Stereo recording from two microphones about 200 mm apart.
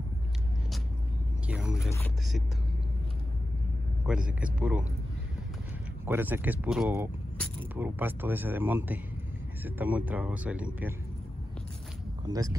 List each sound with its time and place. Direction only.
1.5 s speech: 5° right (ahead or behind)
4.0 s speech: 5° right (ahead or behind)
6.0 s speech: 10° right (ahead or behind)